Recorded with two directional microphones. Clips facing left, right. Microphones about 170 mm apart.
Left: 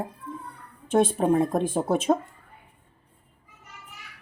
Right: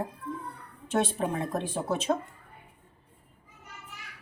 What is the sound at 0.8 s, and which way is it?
A woman's voice, 50° left (ahead or behind).